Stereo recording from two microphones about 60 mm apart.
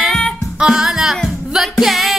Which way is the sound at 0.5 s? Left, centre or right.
Centre.